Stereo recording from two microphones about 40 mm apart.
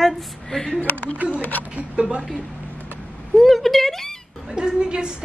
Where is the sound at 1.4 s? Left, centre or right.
Left.